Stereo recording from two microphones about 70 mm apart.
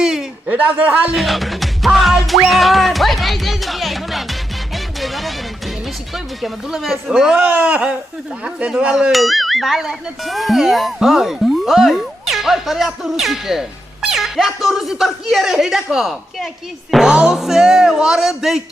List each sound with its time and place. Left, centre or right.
0.0 s a sound: centre
0.4 s a man's voice: right
1.1 s music: centre
6.1 s speech: centre
7.4 s a man's voice: right
9.1 s speech: centre